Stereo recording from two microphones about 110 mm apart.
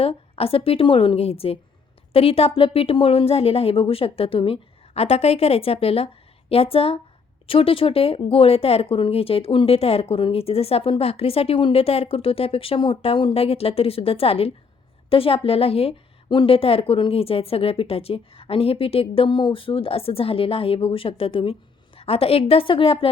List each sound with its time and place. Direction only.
0.0 s speech: 60° left (ahead or behind)